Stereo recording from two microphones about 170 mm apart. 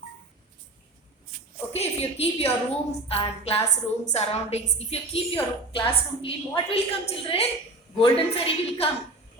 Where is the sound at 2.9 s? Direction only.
35° left (ahead or behind).